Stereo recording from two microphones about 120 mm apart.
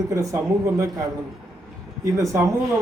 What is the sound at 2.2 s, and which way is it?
Speech, 25° right (ahead or behind).